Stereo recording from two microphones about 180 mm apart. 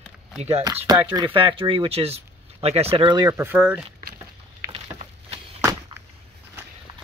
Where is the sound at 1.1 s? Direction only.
30° right (ahead or behind).